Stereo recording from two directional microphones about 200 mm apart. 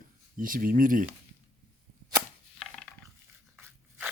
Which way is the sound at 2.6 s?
5° left (ahead or behind).